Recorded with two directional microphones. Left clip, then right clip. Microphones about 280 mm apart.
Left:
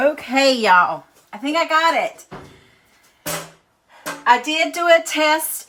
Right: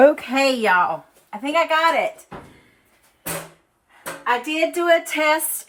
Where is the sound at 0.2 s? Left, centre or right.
Centre.